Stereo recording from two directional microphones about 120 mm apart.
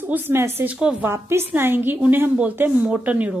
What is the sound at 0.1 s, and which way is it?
A woman's voice, 20° right (ahead or behind).